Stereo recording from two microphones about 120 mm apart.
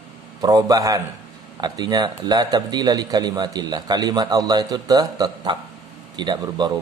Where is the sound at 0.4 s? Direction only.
30° right (ahead or behind).